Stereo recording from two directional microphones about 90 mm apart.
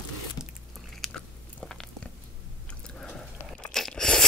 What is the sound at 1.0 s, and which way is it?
Biting, 5° left (ahead or behind).